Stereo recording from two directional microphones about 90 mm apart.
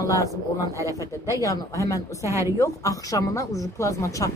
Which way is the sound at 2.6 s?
40° left (ahead or behind).